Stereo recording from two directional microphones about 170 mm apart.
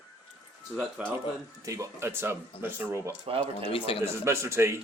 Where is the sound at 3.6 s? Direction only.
30° left (ahead or behind).